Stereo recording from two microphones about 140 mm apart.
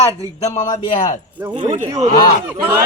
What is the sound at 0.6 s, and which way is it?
Speech, 35° left (ahead or behind).